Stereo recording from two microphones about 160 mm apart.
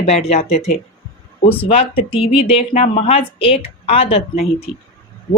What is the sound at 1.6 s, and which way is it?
A woman's voice, 35° left (ahead or behind).